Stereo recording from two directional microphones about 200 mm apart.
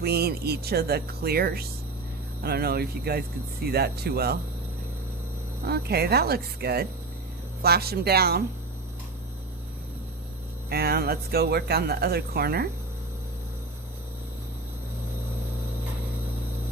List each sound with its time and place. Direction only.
0.0 s speech: 50° right (ahead or behind)
5.6 s speech: 50° right (ahead or behind)
10.7 s speech: 50° right (ahead or behind)